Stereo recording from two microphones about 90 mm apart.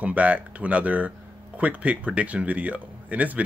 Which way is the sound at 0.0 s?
15° right (ahead or behind).